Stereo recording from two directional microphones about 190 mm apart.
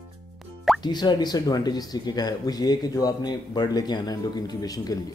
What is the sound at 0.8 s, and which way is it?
Speech, 20° left (ahead or behind).